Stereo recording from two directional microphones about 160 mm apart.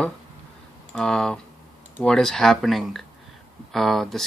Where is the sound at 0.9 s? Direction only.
5° left (ahead or behind).